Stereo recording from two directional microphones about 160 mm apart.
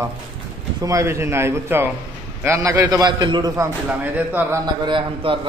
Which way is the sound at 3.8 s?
10° right (ahead or behind).